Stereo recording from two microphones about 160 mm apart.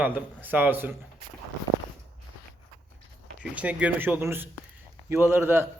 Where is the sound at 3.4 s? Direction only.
10° right (ahead or behind).